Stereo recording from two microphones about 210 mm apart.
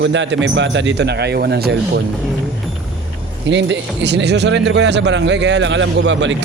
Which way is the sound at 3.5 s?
55° right (ahead or behind).